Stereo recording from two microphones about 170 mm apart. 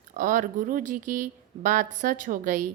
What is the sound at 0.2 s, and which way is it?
Speech, 50° right (ahead or behind).